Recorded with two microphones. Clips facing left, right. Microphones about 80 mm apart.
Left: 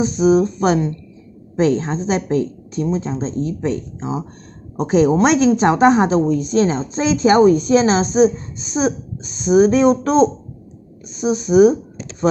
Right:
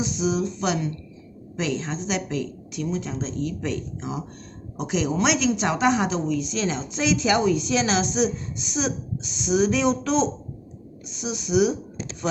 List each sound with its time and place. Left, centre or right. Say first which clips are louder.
0.0 s a woman's voice: left 10 dB; left
4.7 s a woman's voice: left 10 dB; left